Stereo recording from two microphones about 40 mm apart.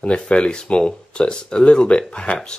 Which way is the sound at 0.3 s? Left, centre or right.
Left.